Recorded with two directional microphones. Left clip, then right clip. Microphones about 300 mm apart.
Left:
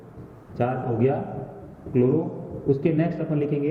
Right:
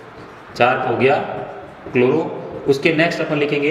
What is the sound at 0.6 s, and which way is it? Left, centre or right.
Speech, centre.